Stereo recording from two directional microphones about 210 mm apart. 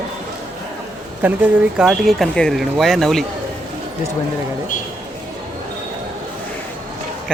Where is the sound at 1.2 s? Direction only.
10° right (ahead or behind).